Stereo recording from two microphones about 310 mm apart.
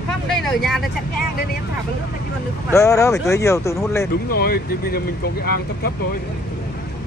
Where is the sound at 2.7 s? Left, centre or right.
Centre.